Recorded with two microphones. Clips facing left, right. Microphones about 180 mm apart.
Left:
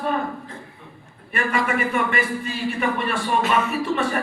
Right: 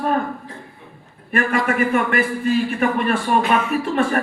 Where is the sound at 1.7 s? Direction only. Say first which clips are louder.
Right 4 dB; 50° right (ahead or behind).